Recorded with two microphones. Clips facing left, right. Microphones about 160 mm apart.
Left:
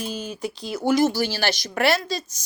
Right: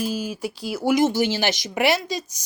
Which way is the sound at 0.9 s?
20° right (ahead or behind).